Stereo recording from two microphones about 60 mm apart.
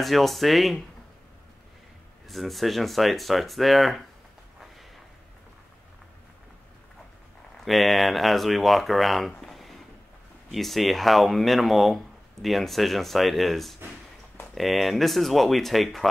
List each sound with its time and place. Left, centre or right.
0.0 s speech: centre
2.2 s speech: centre
7.6 s speech: centre